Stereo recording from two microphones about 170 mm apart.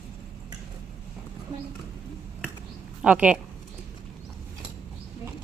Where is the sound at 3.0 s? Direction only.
5° right (ahead or behind).